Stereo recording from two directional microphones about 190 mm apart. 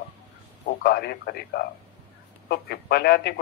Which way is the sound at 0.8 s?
60° left (ahead or behind).